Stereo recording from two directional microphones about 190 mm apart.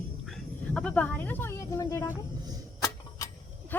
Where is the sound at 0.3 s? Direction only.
5° left (ahead or behind).